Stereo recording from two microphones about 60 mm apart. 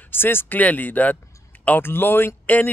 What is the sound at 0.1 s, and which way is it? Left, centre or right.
Speech, left.